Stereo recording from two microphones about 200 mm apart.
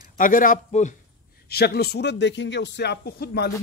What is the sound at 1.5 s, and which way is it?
A man's voice, 50° left (ahead or behind).